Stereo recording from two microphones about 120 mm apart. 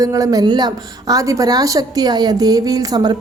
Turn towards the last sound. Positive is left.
turn(degrees=-35)  # may be behind; listen again after turning